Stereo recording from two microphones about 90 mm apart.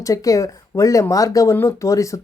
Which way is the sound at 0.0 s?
40° left (ahead or behind).